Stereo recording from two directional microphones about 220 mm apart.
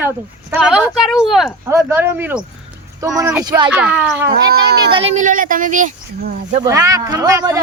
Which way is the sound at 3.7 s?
5° right (ahead or behind).